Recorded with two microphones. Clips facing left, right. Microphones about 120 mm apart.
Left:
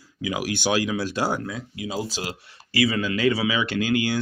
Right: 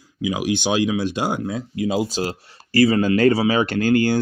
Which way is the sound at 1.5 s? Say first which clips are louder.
Right 8 dB; 40° right (ahead or behind).